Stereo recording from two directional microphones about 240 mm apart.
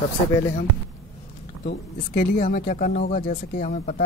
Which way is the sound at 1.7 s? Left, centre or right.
Left.